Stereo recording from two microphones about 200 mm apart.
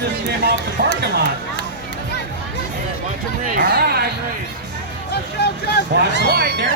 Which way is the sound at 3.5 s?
50° right (ahead or behind).